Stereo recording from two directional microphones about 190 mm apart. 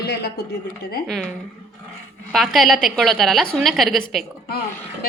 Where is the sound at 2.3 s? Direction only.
Centre (ahead or behind).